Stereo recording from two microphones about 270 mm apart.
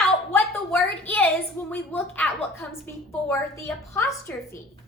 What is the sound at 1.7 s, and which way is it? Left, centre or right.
A woman's voice, centre.